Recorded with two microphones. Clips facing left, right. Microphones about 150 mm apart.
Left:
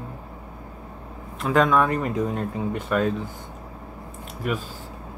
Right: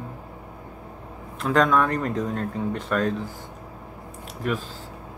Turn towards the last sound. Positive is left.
turn(degrees=5)  # may be behind; listen again after turning